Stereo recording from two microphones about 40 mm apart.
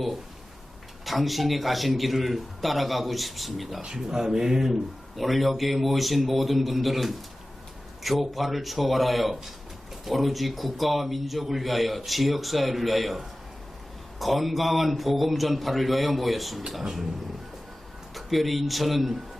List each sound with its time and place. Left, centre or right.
1.0 s speech: centre
3.8 s speech: centre
18.1 s speech: centre